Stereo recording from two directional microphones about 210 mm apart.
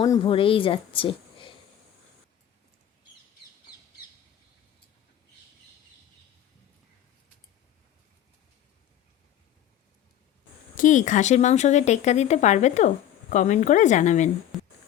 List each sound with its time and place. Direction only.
0.0 s a woman's voice: 20° left (ahead or behind)
10.8 s speech: 35° left (ahead or behind)
14.5 s music: centre (ahead or behind)